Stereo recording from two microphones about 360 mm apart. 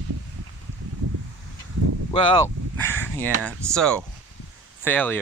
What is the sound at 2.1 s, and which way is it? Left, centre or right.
Speech, centre.